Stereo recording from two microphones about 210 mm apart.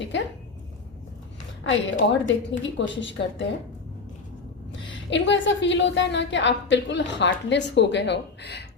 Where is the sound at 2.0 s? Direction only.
60° left (ahead or behind).